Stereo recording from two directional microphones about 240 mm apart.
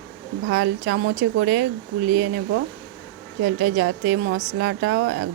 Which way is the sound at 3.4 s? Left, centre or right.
Right.